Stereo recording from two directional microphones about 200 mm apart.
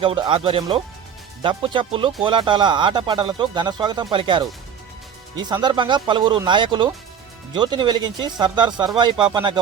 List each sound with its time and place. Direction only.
0.0 s speech: 25° right (ahead or behind)